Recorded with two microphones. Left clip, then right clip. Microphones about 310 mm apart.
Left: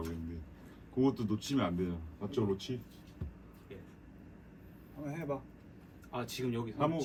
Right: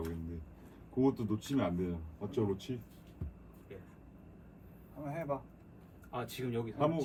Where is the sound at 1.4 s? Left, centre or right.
Centre.